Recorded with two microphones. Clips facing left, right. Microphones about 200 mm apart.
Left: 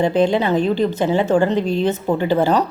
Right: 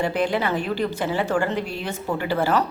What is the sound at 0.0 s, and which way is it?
A woman's voice, 25° left (ahead or behind).